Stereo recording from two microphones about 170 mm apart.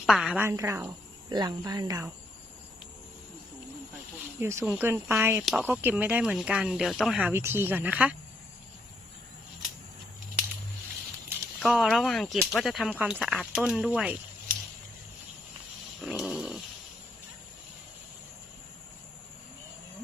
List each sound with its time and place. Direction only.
0.0 s a woman's voice: centre (ahead or behind)
0.4 s speech: 15° right (ahead or behind)
4.4 s speech: 15° right (ahead or behind)
11.6 s speech: centre (ahead or behind)
16.0 s snoring: centre (ahead or behind)